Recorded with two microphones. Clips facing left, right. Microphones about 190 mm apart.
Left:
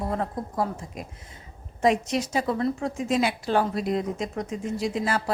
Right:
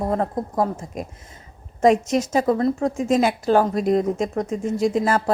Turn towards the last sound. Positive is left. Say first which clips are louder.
# right 7 dB
turn(degrees=-45)  # may be behind; listen again after turning